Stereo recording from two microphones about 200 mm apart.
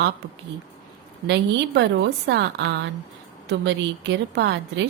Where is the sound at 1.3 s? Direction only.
60° right (ahead or behind).